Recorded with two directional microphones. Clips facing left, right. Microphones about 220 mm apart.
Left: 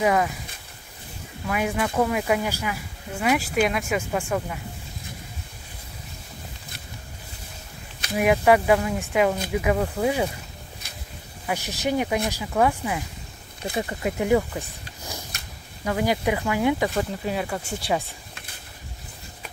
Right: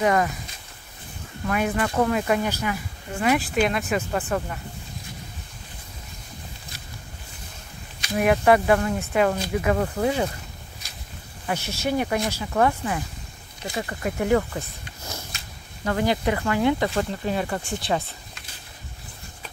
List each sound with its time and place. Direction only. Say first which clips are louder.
0.0 s speech: even; 5° left (ahead or behind)
1.5 s speech: right 1 dB; 10° left (ahead or behind)
8.2 s speech: even; 10° left (ahead or behind)
11.4 s speech: even; 15° left (ahead or behind)
13.7 s speech: left 1 dB; 20° left (ahead or behind)